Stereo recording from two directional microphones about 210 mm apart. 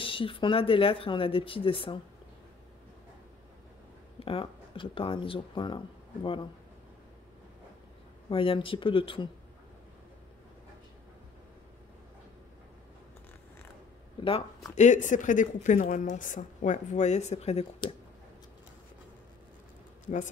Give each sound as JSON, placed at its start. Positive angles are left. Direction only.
{"t": 0.0, "sound": "speech", "side_deg": 25}
{"t": 4.2, "sound": "speech", "side_deg": 25}
{"t": 8.3, "sound": "speech", "side_deg": 25}
{"t": 14.2, "sound": "speech", "side_deg": 25}